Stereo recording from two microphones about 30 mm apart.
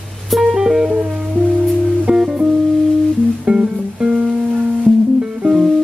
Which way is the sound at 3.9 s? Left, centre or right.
Right.